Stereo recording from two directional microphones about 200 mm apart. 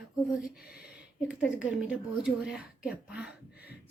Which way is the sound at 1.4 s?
5° right (ahead or behind).